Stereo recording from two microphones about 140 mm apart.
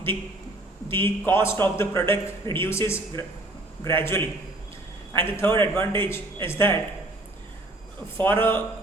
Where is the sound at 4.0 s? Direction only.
20° left (ahead or behind).